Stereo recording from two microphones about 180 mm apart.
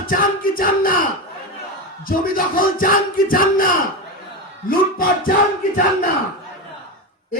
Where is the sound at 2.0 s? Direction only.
55° left (ahead or behind).